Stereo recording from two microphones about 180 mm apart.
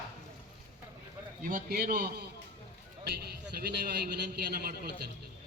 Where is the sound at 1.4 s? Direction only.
50° right (ahead or behind).